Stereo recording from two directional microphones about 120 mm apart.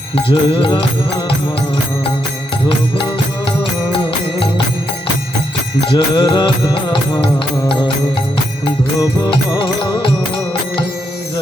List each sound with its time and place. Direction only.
0.2 s music: 45° left (ahead or behind)
3.6 s music: 45° left (ahead or behind)
5.8 s music: 40° left (ahead or behind)
9.6 s music: 40° left (ahead or behind)